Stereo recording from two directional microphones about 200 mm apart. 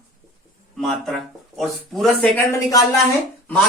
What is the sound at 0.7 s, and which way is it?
A man's voice, centre (ahead or behind).